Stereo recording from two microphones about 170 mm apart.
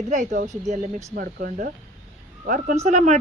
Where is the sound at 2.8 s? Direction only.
40° right (ahead or behind).